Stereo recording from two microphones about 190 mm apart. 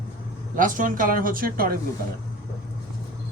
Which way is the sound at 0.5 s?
45° right (ahead or behind).